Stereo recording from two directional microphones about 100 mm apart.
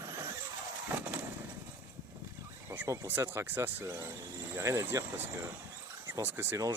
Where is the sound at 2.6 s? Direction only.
25° right (ahead or behind).